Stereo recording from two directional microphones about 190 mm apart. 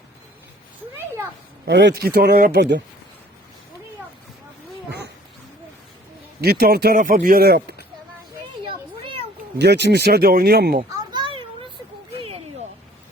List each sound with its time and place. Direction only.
0.9 s speech: 10° right (ahead or behind)
1.6 s speech: 65° right (ahead or behind)
6.4 s speech: 55° right (ahead or behind)
8.6 s a sound: 25° right (ahead or behind)
9.6 s speech: 65° right (ahead or behind)
11.1 s a sound: 25° right (ahead or behind)